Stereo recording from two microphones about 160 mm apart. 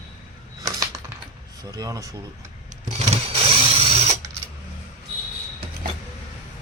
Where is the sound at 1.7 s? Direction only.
20° right (ahead or behind).